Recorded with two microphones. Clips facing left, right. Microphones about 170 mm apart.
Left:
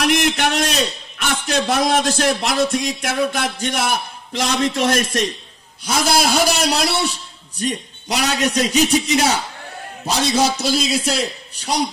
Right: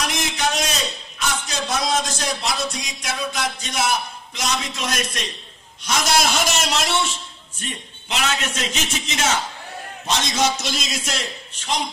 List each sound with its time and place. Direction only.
0.0 s a man's voice: 60° left (ahead or behind)
5.9 s a man's voice: 30° left (ahead or behind)